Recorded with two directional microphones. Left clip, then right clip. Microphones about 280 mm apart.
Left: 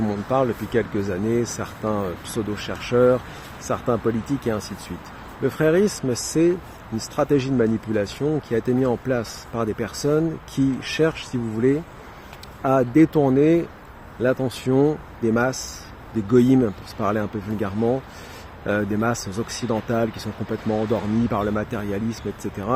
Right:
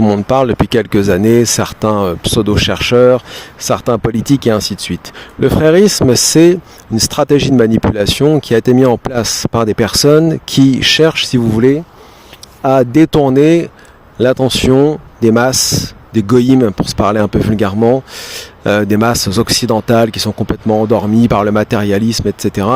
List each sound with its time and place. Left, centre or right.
0.0 s speech: right